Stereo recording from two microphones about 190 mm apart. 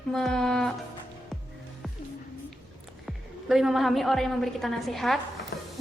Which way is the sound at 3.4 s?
Centre (ahead or behind).